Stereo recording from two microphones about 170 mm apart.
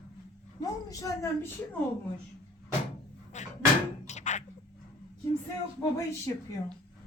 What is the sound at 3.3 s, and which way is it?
Cupboard open or close, 45° left (ahead or behind).